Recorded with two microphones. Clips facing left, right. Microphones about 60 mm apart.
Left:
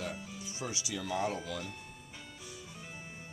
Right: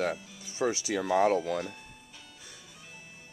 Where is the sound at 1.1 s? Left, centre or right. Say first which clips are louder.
Right 10 dB; right.